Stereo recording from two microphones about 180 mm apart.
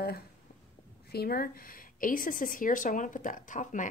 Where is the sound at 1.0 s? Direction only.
60° left (ahead or behind).